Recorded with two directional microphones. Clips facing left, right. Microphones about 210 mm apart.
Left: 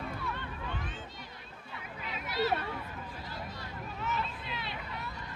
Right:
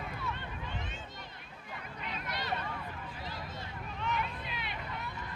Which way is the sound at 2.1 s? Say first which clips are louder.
Left 10 dB; 5° left (ahead or behind).